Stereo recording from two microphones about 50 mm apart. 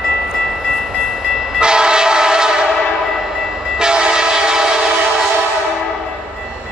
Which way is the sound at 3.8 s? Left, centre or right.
Centre.